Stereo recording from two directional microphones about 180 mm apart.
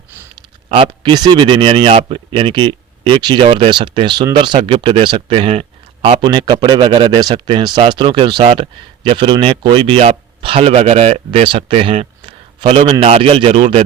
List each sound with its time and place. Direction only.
0.3 s speech: 25° right (ahead or behind)
6.2 s a man's voice: 25° right (ahead or behind)